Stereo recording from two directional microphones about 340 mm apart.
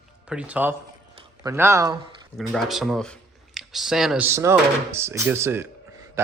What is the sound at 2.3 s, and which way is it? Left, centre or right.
Speech, centre.